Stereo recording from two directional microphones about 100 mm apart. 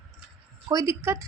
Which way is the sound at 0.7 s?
35° right (ahead or behind).